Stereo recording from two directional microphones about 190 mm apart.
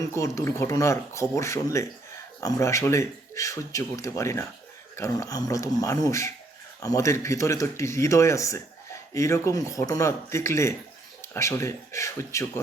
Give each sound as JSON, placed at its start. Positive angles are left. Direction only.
{"t": 0.2, "sound": "speech", "side_deg": 15}